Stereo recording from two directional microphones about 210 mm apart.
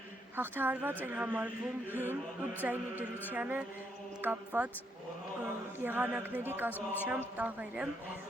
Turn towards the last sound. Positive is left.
turn(degrees=-5)  # may be behind; listen again after turning